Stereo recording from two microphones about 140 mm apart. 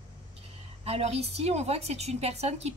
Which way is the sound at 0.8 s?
50° right (ahead or behind).